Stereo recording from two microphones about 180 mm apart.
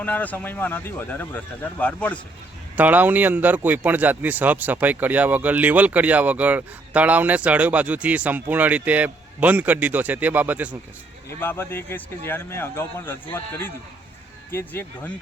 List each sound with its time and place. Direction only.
0.0 s a man's voice: 10° left (ahead or behind)
2.7 s speech: 10° right (ahead or behind)
11.3 s a man's voice: 10° left (ahead or behind)
14.5 s a man's voice: 10° left (ahead or behind)